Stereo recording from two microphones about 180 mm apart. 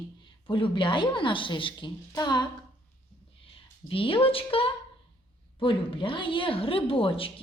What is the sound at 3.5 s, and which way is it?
A woman's voice, 30° left (ahead or behind).